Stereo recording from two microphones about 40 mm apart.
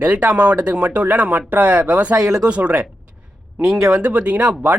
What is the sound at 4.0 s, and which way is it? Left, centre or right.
Speech, right.